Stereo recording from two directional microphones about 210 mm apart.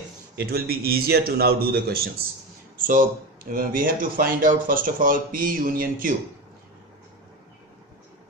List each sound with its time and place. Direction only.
0.4 s a man's voice: 45° right (ahead or behind)